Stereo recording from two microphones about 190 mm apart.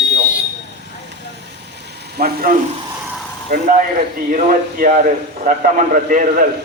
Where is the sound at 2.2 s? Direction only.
50° right (ahead or behind).